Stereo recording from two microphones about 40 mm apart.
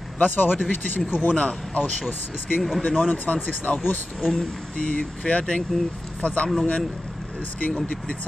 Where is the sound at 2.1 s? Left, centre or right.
Left.